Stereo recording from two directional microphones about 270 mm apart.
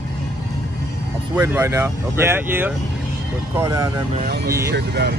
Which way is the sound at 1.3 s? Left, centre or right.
Centre.